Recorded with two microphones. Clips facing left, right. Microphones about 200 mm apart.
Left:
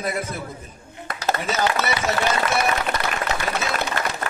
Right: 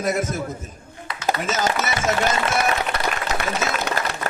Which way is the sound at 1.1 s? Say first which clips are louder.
Left 2 dB; 50° left (ahead or behind).